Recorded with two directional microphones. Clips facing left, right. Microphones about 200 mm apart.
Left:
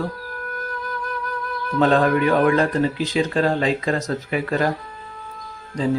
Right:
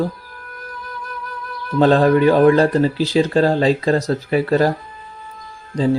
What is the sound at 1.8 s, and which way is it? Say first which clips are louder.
Speech: right 4 dB; 30° right (ahead or behind).